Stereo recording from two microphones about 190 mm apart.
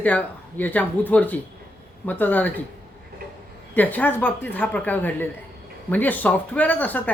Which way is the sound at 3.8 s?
10° left (ahead or behind).